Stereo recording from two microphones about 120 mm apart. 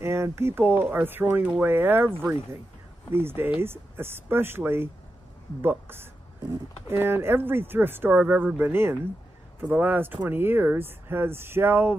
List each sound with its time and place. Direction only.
0.0 s a man's voice: 20° right (ahead or behind)